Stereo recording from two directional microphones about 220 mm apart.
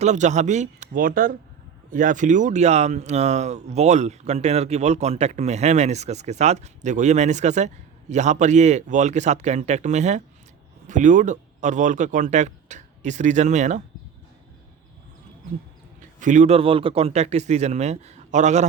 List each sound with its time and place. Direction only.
0.0 s speech: 30° right (ahead or behind)
16.0 s speech: 35° right (ahead or behind)